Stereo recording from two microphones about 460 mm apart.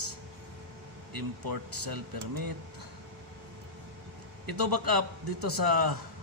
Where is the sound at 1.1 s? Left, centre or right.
Right.